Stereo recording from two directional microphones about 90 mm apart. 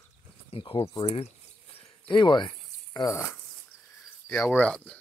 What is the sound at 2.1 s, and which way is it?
Cricket, 60° left (ahead or behind).